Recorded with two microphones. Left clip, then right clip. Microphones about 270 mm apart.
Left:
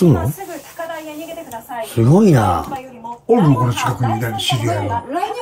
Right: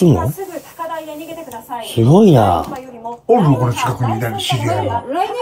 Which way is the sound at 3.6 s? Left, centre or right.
Centre.